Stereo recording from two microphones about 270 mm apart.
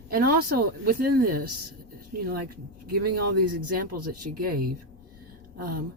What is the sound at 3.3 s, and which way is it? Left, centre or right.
Speech, right.